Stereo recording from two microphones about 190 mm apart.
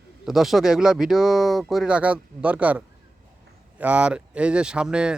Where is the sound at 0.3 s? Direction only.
Centre (ahead or behind).